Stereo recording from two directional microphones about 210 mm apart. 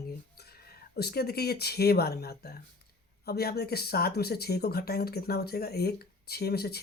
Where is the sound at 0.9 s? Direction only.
50° left (ahead or behind).